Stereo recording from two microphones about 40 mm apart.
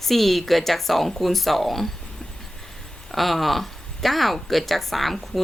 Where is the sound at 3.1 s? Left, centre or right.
Centre.